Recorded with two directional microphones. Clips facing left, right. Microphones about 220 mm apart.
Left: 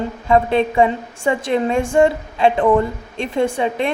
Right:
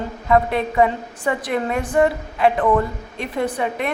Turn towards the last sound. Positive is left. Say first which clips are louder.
# left 4 dB
turn(degrees=25)  # may be behind; listen again after turning